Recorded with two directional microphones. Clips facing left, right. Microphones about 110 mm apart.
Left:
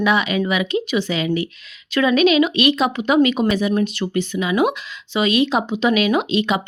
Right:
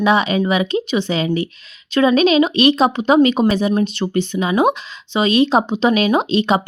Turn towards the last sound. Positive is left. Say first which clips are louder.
# right 3 dB
turn(degrees=-30)  # may be behind; listen again after turning